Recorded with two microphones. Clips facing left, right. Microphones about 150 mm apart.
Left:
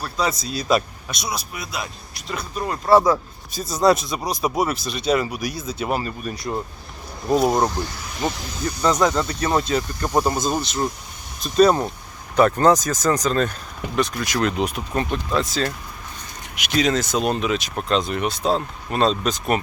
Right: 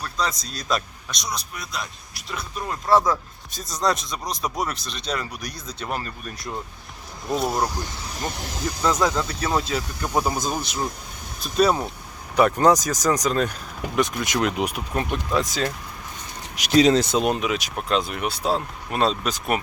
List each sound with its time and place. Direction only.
0.0 s speech: 5° left (ahead or behind)
7.9 s snake: 30° right (ahead or behind)
8.3 s speech: 70° right (ahead or behind)
8.6 s speech: 5° right (ahead or behind)
16.6 s speech: 35° right (ahead or behind)
17.3 s speech: 10° right (ahead or behind)